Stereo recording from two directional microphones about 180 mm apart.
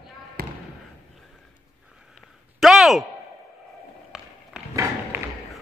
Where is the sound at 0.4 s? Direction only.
60° right (ahead or behind).